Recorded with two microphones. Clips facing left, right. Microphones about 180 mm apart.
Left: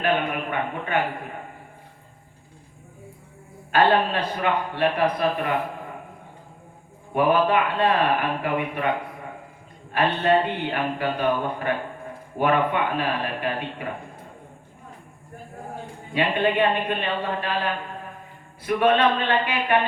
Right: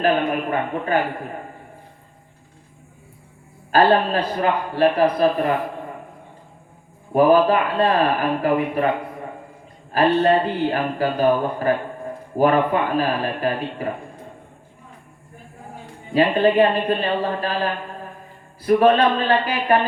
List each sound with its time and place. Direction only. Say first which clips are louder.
0.0 s speech: right 4 dB; 35° right (ahead or behind)
3.7 s speech: right 3 dB; 35° right (ahead or behind)
7.1 s speech: right 5 dB; 35° right (ahead or behind)
9.9 s speech: right 4 dB; 35° right (ahead or behind)
16.1 s speech: right 6 dB; 35° right (ahead or behind)